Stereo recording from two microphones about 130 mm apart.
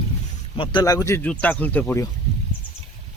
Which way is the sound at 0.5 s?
40° left (ahead or behind).